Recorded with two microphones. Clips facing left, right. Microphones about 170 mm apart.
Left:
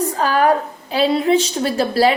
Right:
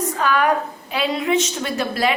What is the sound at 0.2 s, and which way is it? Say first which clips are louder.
A woman's voice: left 3 dB; 35° left (ahead or behind).